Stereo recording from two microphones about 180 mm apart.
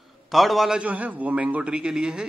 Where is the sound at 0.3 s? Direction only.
Centre (ahead or behind).